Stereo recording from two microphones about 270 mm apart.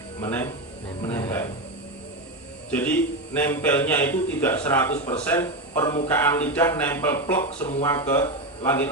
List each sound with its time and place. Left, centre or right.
0.2 s speech: centre
2.6 s a man's voice: centre
4.9 s speech: left
5.2 s speech: centre